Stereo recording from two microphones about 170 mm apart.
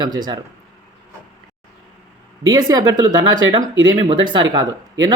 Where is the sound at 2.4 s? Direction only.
25° right (ahead or behind).